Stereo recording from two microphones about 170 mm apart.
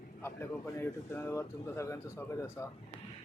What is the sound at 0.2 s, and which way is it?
Speech, 15° left (ahead or behind).